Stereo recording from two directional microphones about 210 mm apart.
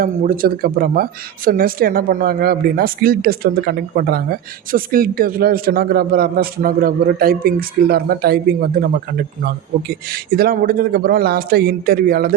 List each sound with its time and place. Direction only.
0.0 s speech: 45° right (ahead or behind)
9.9 s speech: 45° right (ahead or behind)